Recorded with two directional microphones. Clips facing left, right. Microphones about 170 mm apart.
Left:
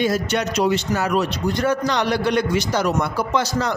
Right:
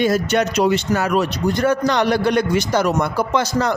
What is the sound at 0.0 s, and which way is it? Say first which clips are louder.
A man's voice: right 3 dB; 50° right (ahead or behind).